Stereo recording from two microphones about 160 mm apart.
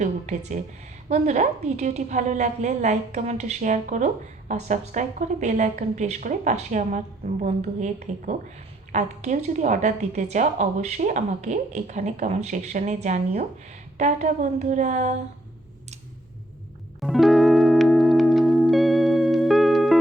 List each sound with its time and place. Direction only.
0.0 s a sound: 50° right (ahead or behind)
1.0 s a woman's voice: 45° right (ahead or behind)
17.0 s music: centre (ahead or behind)